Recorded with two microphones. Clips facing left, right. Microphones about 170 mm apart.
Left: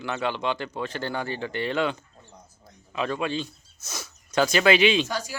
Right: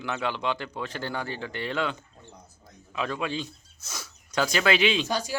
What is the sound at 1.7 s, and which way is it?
Speech, 10° left (ahead or behind).